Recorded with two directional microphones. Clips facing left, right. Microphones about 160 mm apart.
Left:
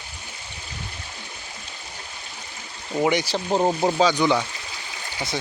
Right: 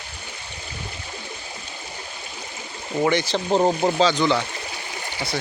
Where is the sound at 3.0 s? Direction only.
10° left (ahead or behind).